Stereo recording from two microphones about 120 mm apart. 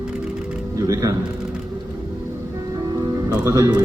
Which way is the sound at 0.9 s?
30° right (ahead or behind).